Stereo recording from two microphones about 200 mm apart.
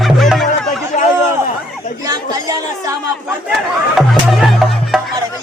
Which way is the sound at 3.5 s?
Centre (ahead or behind).